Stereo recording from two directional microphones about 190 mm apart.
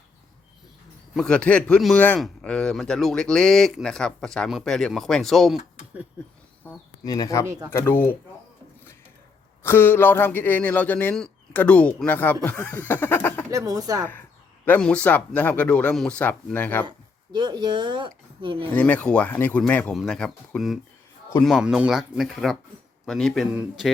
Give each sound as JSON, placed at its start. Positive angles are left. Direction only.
{"t": 1.1, "sound": "a man's voice", "side_deg": 5}
{"t": 6.7, "sound": "speech", "side_deg": 20}
{"t": 7.4, "sound": "speech", "side_deg": -15}
{"t": 7.7, "sound": "speech", "side_deg": 10}
{"t": 9.6, "sound": "speech", "side_deg": 10}
{"t": 13.5, "sound": "speech", "side_deg": -15}
{"t": 14.6, "sound": "speech", "side_deg": 10}
{"t": 17.3, "sound": "speech", "side_deg": -20}
{"t": 18.7, "sound": "a man's voice", "side_deg": 10}